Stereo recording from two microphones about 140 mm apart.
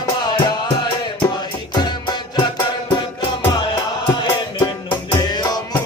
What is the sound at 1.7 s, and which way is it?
Music, 30° left (ahead or behind).